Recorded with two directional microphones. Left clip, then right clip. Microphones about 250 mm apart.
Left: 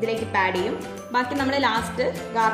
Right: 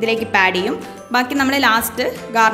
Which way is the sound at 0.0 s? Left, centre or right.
Right.